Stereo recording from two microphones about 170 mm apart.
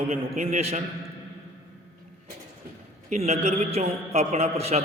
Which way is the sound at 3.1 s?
40° right (ahead or behind).